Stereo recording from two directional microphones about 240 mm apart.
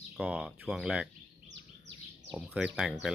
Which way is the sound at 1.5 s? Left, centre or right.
Right.